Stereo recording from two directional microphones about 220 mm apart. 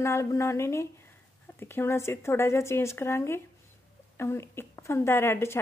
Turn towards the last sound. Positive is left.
turn(degrees=10)  # may be behind; listen again after turning